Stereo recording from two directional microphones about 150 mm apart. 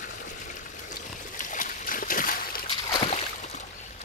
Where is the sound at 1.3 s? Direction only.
60° left (ahead or behind).